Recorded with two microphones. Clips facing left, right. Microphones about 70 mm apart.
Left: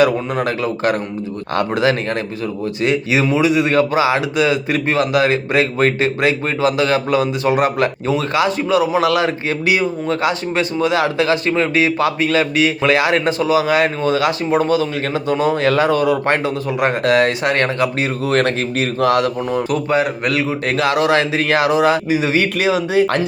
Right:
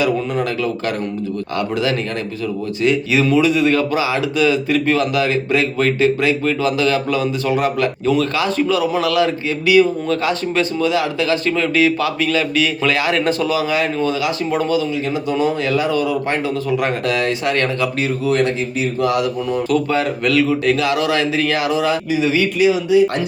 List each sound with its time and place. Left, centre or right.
0.0 s speech: left
18.3 s speech: left
19.0 s speech: left
19.5 s speech: left
22.9 s speech: left